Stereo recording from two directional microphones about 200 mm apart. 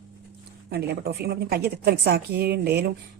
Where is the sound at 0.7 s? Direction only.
50° right (ahead or behind).